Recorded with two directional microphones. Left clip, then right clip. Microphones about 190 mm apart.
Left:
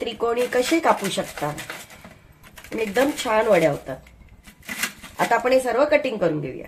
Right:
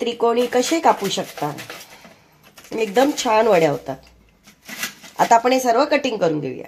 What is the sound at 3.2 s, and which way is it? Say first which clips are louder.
Speech: right 2 dB; 40° right (ahead or behind).